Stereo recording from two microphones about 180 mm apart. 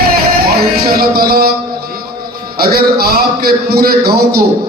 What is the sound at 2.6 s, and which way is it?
A man's voice, 60° right (ahead or behind).